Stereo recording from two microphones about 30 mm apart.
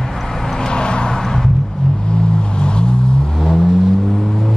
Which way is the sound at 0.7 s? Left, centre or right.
Left.